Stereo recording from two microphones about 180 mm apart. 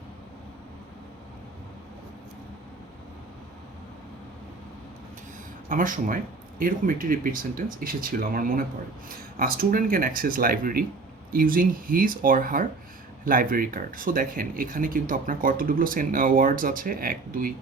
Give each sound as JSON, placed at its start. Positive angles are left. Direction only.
{"t": 5.6, "sound": "speech", "side_deg": -50}